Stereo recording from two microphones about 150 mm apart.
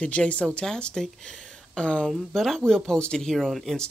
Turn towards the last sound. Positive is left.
turn(degrees=0)  # may be behind; listen again after turning